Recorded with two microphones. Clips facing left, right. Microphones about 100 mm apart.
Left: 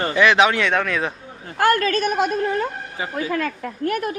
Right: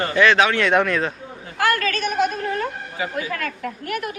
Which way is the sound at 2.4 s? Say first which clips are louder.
Left 2 dB; 25° left (ahead or behind).